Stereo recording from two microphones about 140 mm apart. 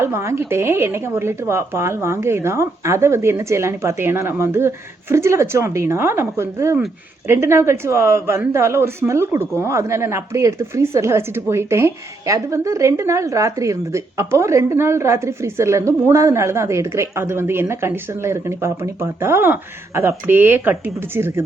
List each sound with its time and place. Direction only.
0.0 s speech: 20° right (ahead or behind)